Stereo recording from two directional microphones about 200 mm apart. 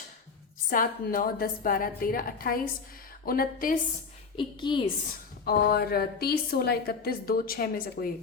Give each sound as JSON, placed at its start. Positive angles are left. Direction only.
{"t": 0.7, "sound": "a woman's voice", "side_deg": 45}
{"t": 4.4, "sound": "a woman's voice", "side_deg": 25}
{"t": 5.5, "sound": "a woman's voice", "side_deg": 50}